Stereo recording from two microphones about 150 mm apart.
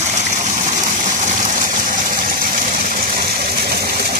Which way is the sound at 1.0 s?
60° right (ahead or behind).